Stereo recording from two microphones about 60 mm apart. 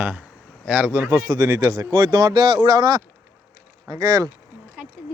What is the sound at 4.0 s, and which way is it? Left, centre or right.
Speech, right.